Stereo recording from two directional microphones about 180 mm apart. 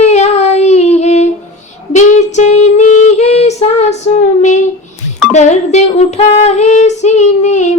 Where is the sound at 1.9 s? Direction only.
40° left (ahead or behind).